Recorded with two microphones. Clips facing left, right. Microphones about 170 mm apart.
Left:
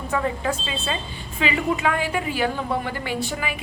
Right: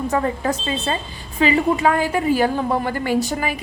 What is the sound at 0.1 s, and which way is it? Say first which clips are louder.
A woman's voice: even; 40° right (ahead or behind).